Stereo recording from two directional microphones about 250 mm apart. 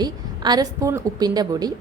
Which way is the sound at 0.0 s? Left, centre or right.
Centre.